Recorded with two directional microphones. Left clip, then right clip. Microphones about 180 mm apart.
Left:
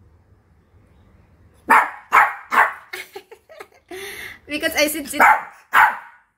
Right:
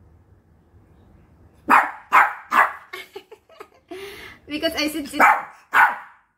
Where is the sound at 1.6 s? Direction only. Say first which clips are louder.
Left 1 dB; centre (ahead or behind).